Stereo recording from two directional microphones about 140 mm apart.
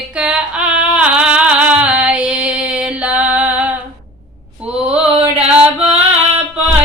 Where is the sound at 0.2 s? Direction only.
5° right (ahead or behind).